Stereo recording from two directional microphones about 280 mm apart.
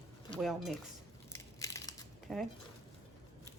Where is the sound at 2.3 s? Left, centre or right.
Centre.